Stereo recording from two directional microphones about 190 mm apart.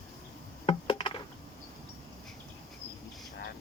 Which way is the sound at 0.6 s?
25° left (ahead or behind).